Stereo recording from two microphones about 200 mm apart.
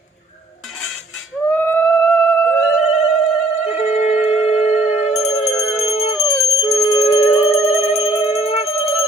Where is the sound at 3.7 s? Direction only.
35° left (ahead or behind).